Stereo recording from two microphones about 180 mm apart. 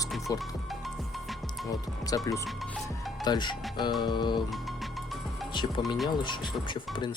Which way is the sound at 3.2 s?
25° left (ahead or behind).